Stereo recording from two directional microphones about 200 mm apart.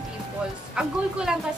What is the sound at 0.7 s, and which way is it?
Speech, 5° right (ahead or behind).